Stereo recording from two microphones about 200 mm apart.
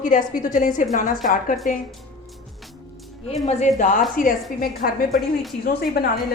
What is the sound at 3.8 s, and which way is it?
A woman's voice, 40° left (ahead or behind).